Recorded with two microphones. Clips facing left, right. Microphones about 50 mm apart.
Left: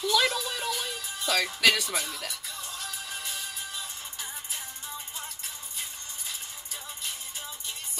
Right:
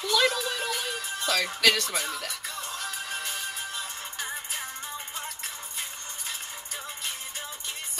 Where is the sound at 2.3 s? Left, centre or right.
Right.